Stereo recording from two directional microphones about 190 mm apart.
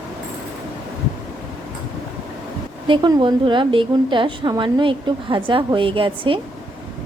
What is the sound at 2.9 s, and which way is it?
A woman's voice, 20° right (ahead or behind).